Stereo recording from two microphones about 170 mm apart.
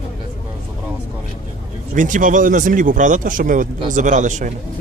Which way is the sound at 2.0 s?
50° right (ahead or behind).